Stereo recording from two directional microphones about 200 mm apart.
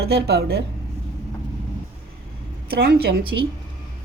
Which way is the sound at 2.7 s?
50° right (ahead or behind).